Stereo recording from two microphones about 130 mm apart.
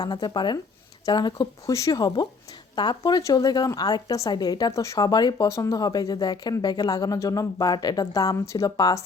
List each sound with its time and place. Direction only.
0.0 s a woman's voice: 35° left (ahead or behind)